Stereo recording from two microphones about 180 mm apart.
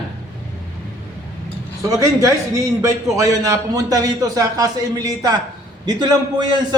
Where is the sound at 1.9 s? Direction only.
15° right (ahead or behind).